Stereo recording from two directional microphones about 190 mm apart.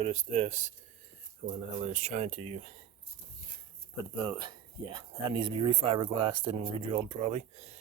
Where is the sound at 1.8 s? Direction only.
35° right (ahead or behind).